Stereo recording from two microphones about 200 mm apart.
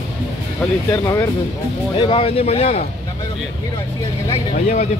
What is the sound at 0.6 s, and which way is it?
Speech, 15° left (ahead or behind).